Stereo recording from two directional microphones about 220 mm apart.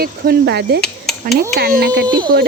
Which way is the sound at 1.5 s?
45° right (ahead or behind).